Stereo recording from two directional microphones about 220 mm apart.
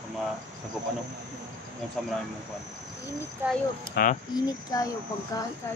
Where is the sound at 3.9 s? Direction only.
40° left (ahead or behind).